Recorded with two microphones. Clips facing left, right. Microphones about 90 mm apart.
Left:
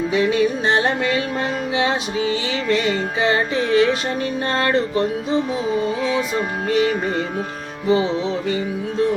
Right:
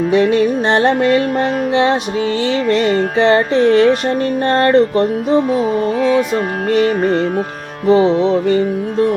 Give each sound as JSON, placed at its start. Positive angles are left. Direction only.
{"t": 0.1, "sound": "music", "side_deg": -55}